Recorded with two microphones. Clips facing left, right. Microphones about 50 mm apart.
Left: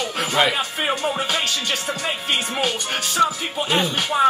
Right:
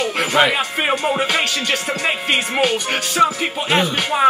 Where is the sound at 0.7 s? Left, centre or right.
Right.